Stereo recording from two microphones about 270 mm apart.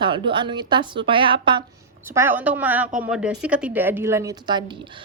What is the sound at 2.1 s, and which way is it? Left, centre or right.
A woman's voice, centre.